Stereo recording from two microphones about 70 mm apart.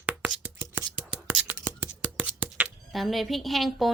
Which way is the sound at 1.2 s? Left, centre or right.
Centre.